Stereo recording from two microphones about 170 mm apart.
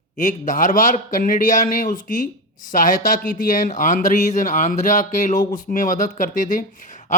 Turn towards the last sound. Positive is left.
turn(degrees=50)  # may be behind; listen again after turning